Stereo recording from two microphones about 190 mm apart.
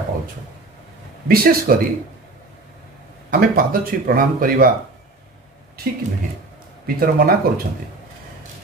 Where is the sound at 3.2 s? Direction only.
50° right (ahead or behind).